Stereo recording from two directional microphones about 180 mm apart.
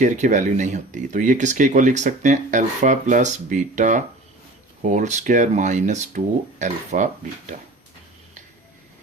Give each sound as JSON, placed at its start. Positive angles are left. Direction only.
{"t": 0.0, "sound": "speech", "side_deg": -45}